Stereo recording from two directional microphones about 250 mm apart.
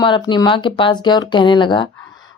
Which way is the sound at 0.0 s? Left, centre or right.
Centre.